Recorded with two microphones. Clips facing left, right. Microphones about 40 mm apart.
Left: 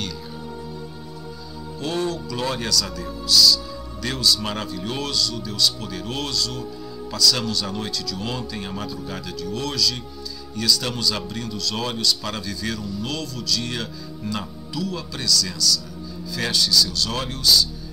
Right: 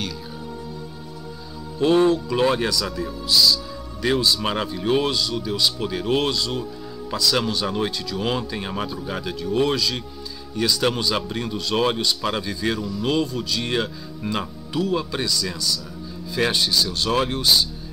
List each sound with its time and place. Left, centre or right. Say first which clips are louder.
1.8 s speech: right 9 dB; right